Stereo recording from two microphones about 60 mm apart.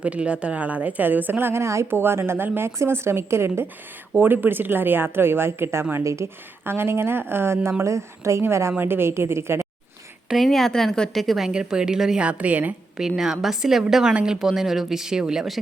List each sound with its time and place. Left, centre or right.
0.0 s a woman's voice: right
1.9 s a woman's voice: right
4.1 s speech: right
6.0 s a woman's voice: right
6.7 s a woman's voice: right
10.2 s a woman's voice: centre
11.4 s speech: centre
12.2 s a woman's voice: right
13.0 s speech: centre
14.3 s speech: centre